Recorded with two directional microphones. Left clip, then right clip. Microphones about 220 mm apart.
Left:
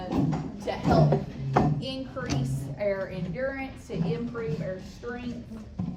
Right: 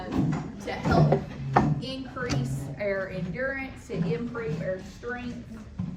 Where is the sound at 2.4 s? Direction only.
10° left (ahead or behind).